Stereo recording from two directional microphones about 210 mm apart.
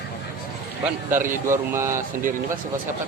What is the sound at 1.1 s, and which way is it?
Speech, 10° right (ahead or behind).